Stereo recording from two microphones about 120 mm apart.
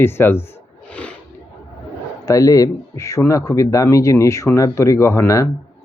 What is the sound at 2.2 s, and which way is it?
Speech, 30° left (ahead or behind).